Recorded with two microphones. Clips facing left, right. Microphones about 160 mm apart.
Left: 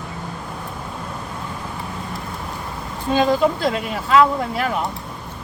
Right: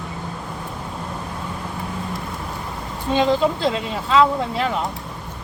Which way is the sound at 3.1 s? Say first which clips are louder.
Left 1 dB; 20° right (ahead or behind).